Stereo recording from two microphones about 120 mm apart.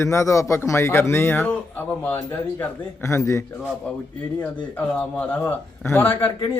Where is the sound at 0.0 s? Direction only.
25° left (ahead or behind).